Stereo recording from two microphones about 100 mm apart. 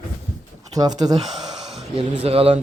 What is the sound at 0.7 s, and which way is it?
Speech, 40° right (ahead or behind).